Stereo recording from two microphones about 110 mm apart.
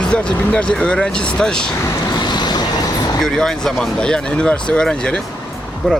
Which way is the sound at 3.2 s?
5° left (ahead or behind).